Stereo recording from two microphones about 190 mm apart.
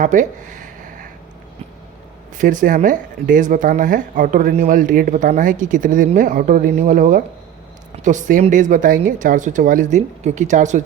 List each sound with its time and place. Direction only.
0.0 s speech: 40° right (ahead or behind)
2.4 s speech: 45° right (ahead or behind)